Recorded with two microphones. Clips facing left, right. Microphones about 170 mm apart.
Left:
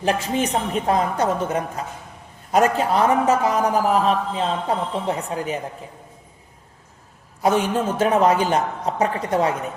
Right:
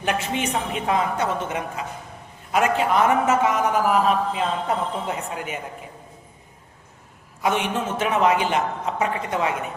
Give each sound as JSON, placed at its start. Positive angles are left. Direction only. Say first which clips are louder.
{"t": 0.0, "sound": "a man's voice", "louder": "left 3 dB", "side_deg": 35}
{"t": 7.4, "sound": "a man's voice", "louder": "left 4 dB", "side_deg": 35}